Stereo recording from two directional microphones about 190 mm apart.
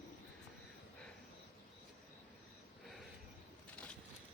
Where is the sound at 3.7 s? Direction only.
5° left (ahead or behind).